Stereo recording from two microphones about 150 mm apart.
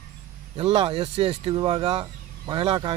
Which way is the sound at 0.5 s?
40° right (ahead or behind).